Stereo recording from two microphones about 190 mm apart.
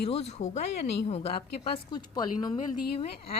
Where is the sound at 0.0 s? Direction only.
30° left (ahead or behind).